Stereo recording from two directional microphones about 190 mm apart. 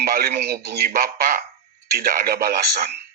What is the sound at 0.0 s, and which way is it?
A man's voice, 50° right (ahead or behind).